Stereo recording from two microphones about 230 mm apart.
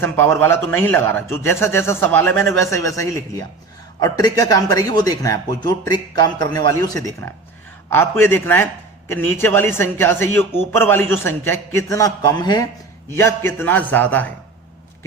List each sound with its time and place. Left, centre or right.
0.0 s a man's voice: centre